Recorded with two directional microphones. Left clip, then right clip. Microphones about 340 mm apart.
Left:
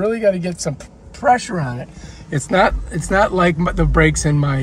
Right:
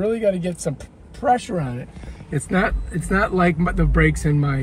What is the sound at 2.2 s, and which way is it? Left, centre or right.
Speech, left.